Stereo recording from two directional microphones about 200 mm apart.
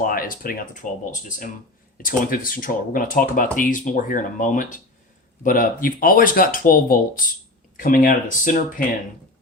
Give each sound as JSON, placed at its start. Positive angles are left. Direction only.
{"t": 0.0, "sound": "speech", "side_deg": 45}